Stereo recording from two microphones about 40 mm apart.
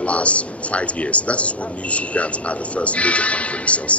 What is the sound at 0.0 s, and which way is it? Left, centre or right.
A man's voice, left.